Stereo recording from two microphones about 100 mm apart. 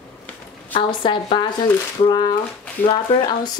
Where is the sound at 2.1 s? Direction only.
45° left (ahead or behind).